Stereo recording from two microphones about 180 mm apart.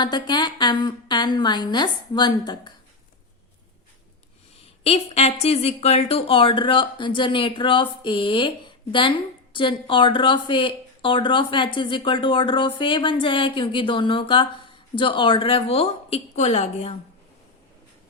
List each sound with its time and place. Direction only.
0.0 s a woman's voice: 25° left (ahead or behind)
4.8 s a woman's voice: 35° left (ahead or behind)